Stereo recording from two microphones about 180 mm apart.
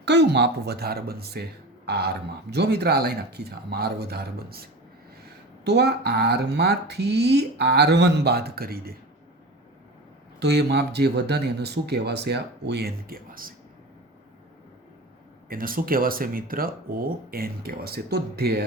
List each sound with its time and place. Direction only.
0.0 s speech: 70° right (ahead or behind)
10.4 s speech: 65° right (ahead or behind)
15.4 s speech: 50° right (ahead or behind)